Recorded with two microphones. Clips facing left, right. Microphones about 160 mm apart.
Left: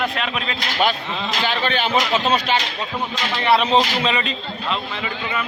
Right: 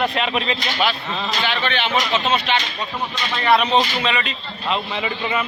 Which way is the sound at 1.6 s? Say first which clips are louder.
Left 1 dB; 40° left (ahead or behind).